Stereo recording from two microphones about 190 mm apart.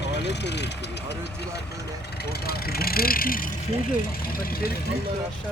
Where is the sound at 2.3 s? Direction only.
55° left (ahead or behind).